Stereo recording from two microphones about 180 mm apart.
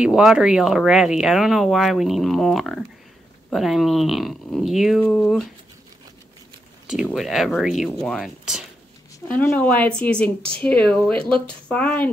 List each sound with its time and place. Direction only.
0.0 s speech: 5° right (ahead or behind)
7.1 s speech: centre (ahead or behind)
9.3 s speech: 10° left (ahead or behind)